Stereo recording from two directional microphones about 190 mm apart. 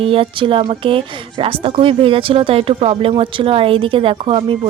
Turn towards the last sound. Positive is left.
turn(degrees=-30)  # may be behind; listen again after turning